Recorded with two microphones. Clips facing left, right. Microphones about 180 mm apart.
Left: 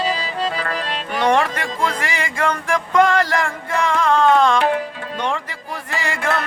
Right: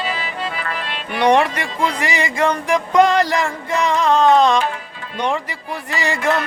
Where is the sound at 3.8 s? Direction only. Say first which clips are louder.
Right 1 dB; 15° right (ahead or behind).